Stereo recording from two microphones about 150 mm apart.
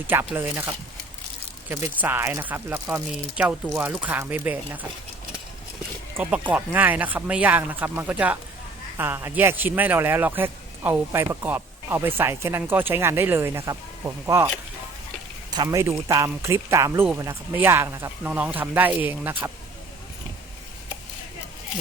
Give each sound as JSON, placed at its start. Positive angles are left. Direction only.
{"t": 0.3, "sound": "speech", "side_deg": -15}
{"t": 1.7, "sound": "speech", "side_deg": -15}
{"t": 6.1, "sound": "speech", "side_deg": -10}